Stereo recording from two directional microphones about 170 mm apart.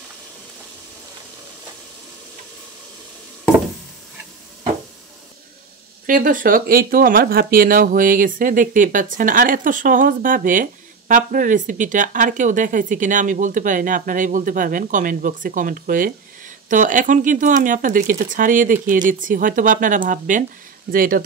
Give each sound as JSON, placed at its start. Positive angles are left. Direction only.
{"t": 6.0, "sound": "speech", "side_deg": -50}